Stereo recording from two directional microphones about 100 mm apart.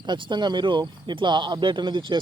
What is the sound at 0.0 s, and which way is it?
Speech, 50° right (ahead or behind).